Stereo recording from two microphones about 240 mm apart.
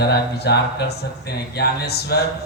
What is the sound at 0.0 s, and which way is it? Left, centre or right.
Speech, left.